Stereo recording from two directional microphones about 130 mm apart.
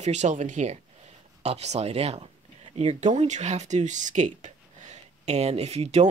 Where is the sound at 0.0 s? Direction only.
65° right (ahead or behind).